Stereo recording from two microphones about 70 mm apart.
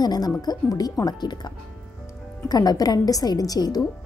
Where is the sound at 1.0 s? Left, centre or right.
Left.